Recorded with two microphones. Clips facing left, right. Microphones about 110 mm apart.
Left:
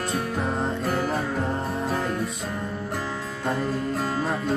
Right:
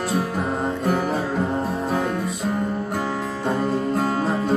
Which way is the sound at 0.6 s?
5° right (ahead or behind).